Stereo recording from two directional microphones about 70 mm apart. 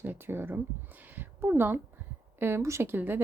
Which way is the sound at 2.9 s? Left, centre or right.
Right.